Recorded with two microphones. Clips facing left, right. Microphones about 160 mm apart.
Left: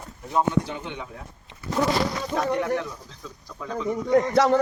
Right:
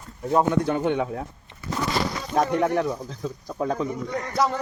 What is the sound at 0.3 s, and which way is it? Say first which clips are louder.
Speech: right 3 dB; 50° right (ahead or behind).